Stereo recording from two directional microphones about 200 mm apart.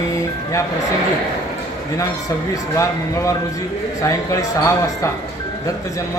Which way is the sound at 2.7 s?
15° left (ahead or behind).